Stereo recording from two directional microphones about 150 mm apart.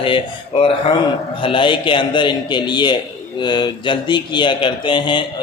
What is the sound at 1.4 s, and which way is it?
A man's voice, 35° left (ahead or behind).